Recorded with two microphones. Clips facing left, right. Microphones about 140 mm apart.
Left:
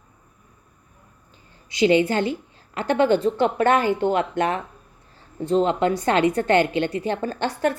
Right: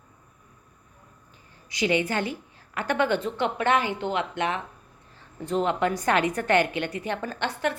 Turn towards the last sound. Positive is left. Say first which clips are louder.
# left 5 dB
turn(degrees=35)  # may be behind; listen again after turning